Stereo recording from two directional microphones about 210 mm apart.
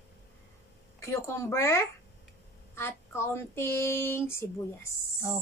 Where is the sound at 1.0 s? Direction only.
15° left (ahead or behind).